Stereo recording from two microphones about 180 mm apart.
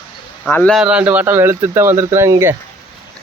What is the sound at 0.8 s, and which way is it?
Speech, 5° right (ahead or behind).